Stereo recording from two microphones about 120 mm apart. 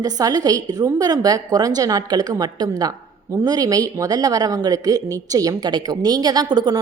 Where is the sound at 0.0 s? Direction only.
30° right (ahead or behind).